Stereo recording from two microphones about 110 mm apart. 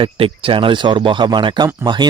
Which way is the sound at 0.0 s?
50° right (ahead or behind).